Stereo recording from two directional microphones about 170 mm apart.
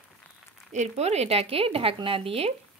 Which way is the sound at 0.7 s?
40° right (ahead or behind).